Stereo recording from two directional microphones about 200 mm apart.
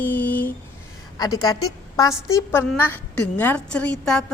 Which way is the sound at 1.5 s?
20° left (ahead or behind).